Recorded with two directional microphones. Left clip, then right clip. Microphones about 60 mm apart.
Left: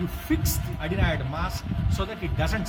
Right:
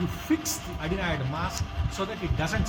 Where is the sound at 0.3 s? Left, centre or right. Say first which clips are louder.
Even; centre.